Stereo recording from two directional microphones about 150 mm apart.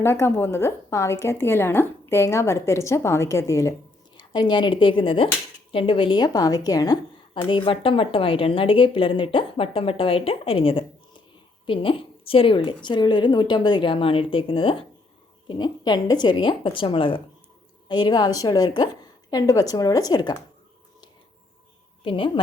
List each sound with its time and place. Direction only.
0.0 s a woman's voice: 15° left (ahead or behind)
22.0 s a woman's voice: 35° left (ahead or behind)